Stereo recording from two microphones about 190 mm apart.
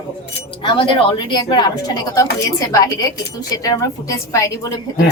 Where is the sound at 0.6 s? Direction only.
25° left (ahead or behind).